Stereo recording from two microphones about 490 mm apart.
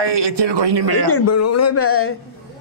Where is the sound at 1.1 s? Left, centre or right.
Left.